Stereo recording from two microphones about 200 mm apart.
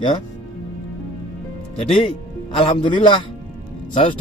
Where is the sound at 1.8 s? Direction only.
30° left (ahead or behind).